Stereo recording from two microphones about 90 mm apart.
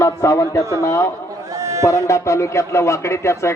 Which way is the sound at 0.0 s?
35° left (ahead or behind).